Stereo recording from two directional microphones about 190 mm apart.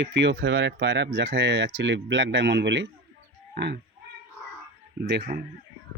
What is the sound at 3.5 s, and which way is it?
Frog, 65° right (ahead or behind).